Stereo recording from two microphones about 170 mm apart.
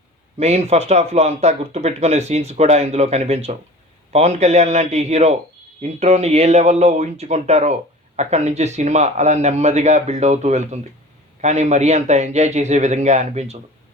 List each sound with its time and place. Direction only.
0.3 s a man's voice: 40° right (ahead or behind)